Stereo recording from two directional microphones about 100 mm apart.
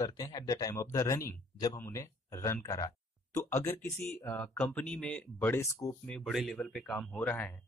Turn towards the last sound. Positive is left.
turn(degrees=15)  # may be behind; listen again after turning